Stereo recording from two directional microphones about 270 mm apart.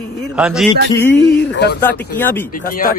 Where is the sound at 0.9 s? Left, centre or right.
Centre.